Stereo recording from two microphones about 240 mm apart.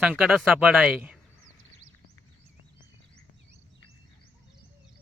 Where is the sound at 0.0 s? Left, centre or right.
Centre.